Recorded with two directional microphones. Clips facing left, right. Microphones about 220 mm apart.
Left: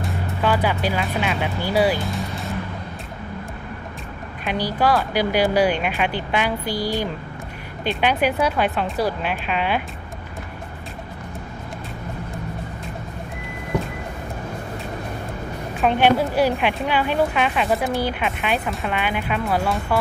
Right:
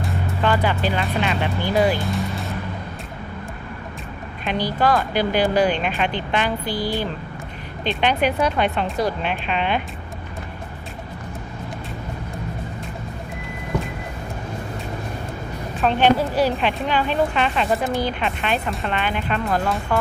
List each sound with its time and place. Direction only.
0.0 s music: 5° left (ahead or behind)
1.0 s speech: 5° left (ahead or behind)
4.5 s speech: 10° left (ahead or behind)
15.8 s speech: 15° left (ahead or behind)